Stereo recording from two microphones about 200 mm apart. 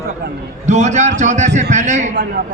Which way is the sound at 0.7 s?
35° right (ahead or behind).